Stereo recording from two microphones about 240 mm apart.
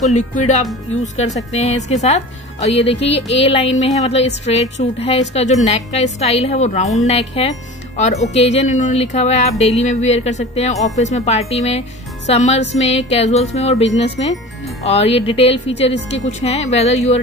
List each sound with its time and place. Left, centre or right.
0.0 s speech: left